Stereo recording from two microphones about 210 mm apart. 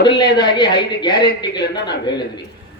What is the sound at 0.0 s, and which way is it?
Speech, 55° left (ahead or behind).